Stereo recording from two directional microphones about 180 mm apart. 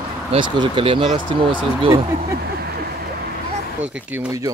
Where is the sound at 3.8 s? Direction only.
15° right (ahead or behind).